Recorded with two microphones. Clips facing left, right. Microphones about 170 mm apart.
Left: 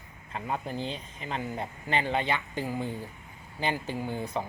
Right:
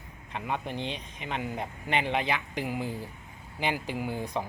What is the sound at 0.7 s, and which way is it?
Speech, 20° right (ahead or behind).